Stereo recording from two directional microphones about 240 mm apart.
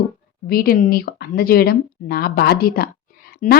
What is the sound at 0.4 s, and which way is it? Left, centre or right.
Speech, left.